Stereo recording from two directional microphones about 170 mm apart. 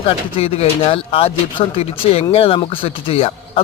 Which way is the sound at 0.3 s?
35° left (ahead or behind).